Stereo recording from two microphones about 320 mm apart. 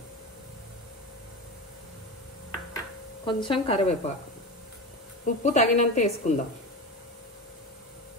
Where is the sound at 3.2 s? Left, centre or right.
Centre.